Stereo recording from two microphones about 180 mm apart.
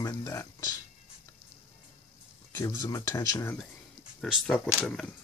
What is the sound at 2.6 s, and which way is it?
Speech, 20° left (ahead or behind).